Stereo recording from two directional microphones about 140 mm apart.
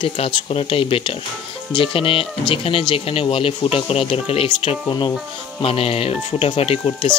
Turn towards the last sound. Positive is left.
turn(degrees=45)  # may be behind; listen again after turning